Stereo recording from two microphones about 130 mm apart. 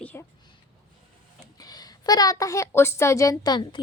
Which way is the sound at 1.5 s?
30° left (ahead or behind).